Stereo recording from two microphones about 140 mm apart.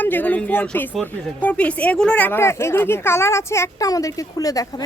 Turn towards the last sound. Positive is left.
turn(degrees=25)  # may be behind; listen again after turning